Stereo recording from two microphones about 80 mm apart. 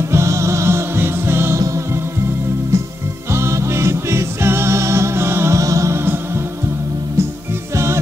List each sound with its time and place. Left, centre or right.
0.1 s music: right
2.7 s music: right
7.7 s music: right